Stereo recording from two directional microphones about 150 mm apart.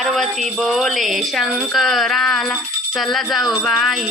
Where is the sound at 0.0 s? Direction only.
Centre (ahead or behind).